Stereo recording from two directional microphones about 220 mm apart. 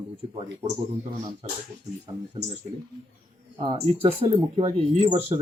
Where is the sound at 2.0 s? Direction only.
25° right (ahead or behind).